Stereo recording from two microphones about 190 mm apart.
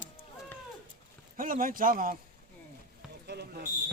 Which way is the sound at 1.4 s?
45° right (ahead or behind).